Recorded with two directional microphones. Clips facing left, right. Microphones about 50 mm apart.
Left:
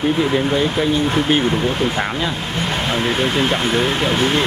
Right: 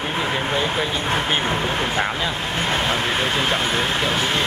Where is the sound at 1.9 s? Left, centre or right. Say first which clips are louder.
Left 1 dB; centre.